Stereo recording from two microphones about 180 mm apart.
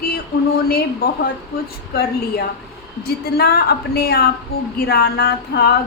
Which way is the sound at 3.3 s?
60° left (ahead or behind).